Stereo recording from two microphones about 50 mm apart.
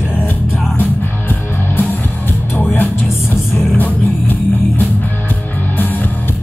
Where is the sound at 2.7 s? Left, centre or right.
Left.